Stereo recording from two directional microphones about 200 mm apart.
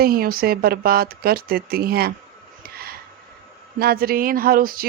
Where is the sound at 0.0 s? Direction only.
50° right (ahead or behind).